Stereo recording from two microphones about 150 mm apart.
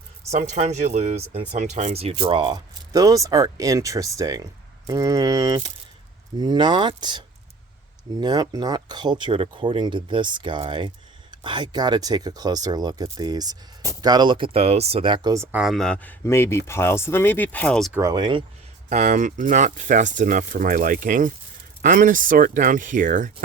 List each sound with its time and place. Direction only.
0.3 s speech: 50° right (ahead or behind); by 15.4 s 25° right (ahead or behind)
15.5 s speech: centre (ahead or behind)
18.1 s speech: 30° right (ahead or behind)
18.9 s speech: 50° right (ahead or behind)